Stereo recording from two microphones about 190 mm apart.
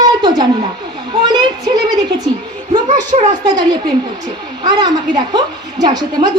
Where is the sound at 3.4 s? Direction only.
20° right (ahead or behind).